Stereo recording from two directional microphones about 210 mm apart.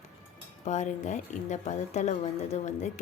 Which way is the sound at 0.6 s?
35° left (ahead or behind).